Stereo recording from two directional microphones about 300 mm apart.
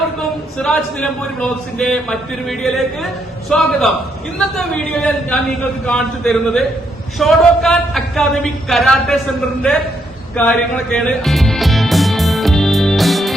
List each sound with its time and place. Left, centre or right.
0.6 s a man's voice: centre
10.3 s music: centre